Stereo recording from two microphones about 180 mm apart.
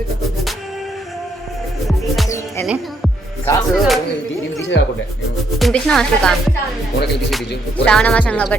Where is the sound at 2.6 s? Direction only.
5° right (ahead or behind).